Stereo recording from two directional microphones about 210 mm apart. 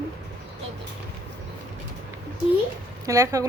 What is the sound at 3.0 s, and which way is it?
Speech, 15° right (ahead or behind).